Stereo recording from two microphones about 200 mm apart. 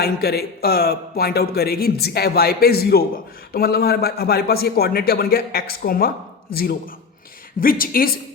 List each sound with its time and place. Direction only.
0.0 s a man's voice: 50° left (ahead or behind)
7.6 s a man's voice: 45° left (ahead or behind)